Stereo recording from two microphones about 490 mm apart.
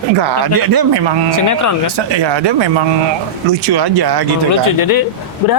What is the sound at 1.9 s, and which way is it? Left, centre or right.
Speech, right.